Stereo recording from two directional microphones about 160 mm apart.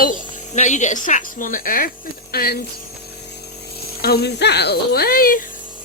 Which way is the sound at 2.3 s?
75° left (ahead or behind).